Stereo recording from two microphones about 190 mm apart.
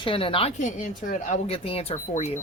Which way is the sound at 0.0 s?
30° left (ahead or behind).